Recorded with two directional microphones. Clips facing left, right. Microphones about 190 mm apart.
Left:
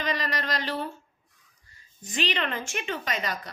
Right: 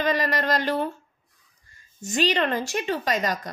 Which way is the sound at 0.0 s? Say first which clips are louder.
Right 6 dB; 50° right (ahead or behind).